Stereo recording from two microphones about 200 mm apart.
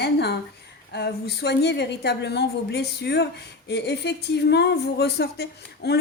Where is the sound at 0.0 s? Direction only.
55° left (ahead or behind).